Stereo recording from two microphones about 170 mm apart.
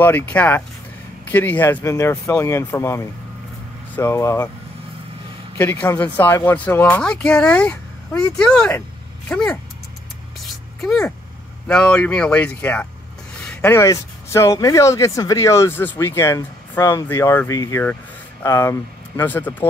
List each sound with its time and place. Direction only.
0.0 s speech: 10° left (ahead or behind)
5.6 s speech: 10° left (ahead or behind)
10.8 s speech: centre (ahead or behind)